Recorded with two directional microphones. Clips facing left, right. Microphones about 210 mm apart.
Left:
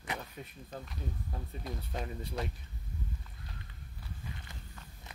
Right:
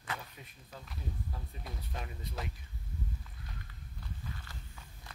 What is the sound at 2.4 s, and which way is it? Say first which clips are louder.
Speech: left 4 dB; 5° right (ahead or behind).